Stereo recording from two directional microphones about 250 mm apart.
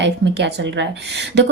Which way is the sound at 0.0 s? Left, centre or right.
Right.